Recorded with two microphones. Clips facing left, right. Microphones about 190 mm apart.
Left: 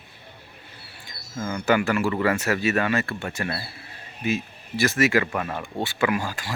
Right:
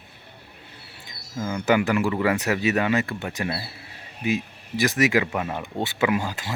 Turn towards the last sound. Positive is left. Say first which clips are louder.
# right 1 dB
turn(degrees=-20)  # may be behind; listen again after turning